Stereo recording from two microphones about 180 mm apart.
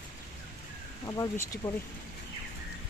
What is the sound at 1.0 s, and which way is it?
Speech, 20° left (ahead or behind).